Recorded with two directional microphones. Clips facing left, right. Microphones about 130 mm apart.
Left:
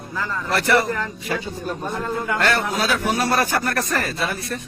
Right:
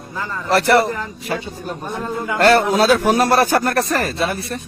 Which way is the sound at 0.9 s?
15° right (ahead or behind).